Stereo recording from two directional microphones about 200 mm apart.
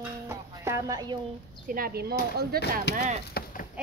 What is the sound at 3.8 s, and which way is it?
Run, 5° right (ahead or behind).